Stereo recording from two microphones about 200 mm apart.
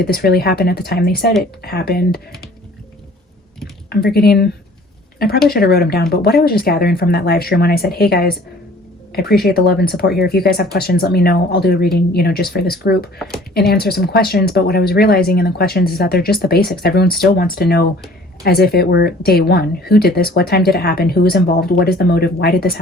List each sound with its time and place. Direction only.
0.0 s speech: 50° left (ahead or behind)
3.8 s speech: 50° left (ahead or behind)
5.5 s speech: 50° left (ahead or behind)